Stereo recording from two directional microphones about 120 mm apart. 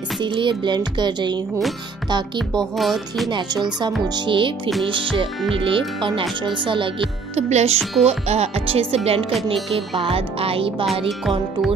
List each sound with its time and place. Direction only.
0.2 s music: 40° right (ahead or behind)
2.6 s music: centre (ahead or behind)
4.1 s speech: 45° right (ahead or behind)
7.3 s speech: 65° right (ahead or behind); by 10.9 s 50° right (ahead or behind)
11.1 s music: centre (ahead or behind)